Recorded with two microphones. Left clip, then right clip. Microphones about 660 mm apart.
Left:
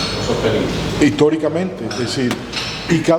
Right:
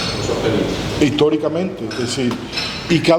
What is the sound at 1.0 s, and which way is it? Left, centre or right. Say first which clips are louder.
Speech: left 1 dB; centre.